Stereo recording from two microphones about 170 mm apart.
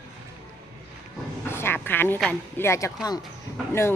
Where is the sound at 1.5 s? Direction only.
15° left (ahead or behind).